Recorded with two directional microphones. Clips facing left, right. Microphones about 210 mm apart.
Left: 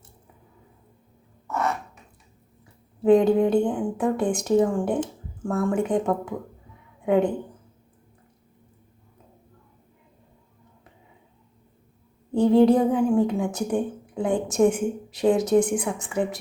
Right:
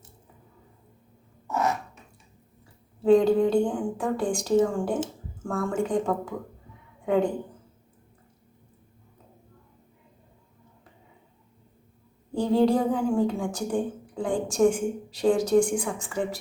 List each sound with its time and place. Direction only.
3.0 s a woman's voice: 20° left (ahead or behind)
7.0 s a woman's voice: 20° left (ahead or behind)
12.3 s a woman's voice: 20° left (ahead or behind)